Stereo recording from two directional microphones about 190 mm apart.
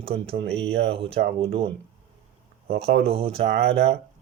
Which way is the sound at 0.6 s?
30° right (ahead or behind).